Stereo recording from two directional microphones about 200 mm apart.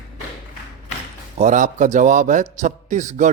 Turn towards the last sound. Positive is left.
turn(degrees=-40)  # may be behind; listen again after turning